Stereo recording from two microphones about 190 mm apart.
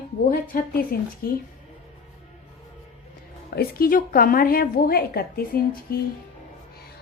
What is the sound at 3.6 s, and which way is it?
A woman's voice, 50° left (ahead or behind).